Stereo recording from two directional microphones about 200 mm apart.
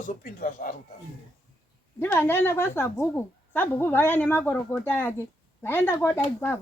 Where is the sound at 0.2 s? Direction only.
45° left (ahead or behind).